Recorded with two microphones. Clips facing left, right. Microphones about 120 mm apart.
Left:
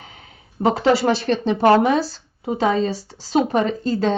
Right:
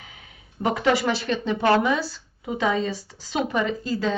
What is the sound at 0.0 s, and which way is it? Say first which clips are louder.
Speech: left 4 dB; 35° left (ahead or behind).